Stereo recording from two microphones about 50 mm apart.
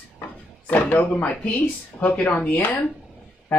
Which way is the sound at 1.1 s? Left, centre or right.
Left.